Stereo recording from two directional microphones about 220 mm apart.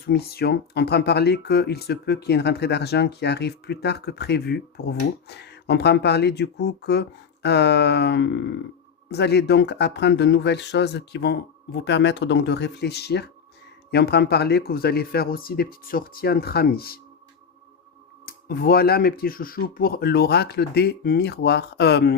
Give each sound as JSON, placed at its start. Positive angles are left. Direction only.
{"t": 0.0, "sound": "speech", "side_deg": 45}
{"t": 18.3, "sound": "speech", "side_deg": 40}